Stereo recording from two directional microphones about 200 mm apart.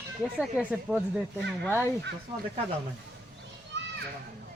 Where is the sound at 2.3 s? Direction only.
20° right (ahead or behind).